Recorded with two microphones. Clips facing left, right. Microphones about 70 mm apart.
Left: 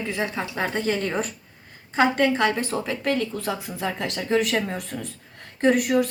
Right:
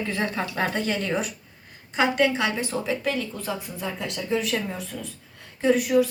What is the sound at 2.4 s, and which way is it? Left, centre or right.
Speech, left.